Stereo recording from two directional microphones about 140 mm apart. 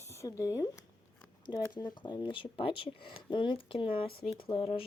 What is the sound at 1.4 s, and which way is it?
Speech, 30° left (ahead or behind).